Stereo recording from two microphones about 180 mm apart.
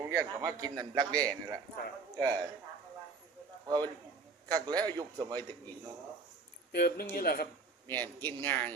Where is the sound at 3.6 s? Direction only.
20° right (ahead or behind).